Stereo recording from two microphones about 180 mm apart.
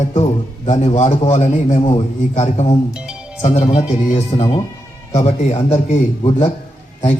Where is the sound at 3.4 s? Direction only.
35° left (ahead or behind).